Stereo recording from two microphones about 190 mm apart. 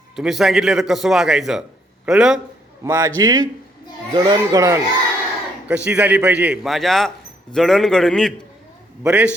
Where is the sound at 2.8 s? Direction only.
15° right (ahead or behind).